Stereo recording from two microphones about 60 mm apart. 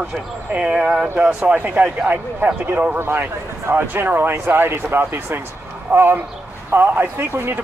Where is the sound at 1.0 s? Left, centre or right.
Right.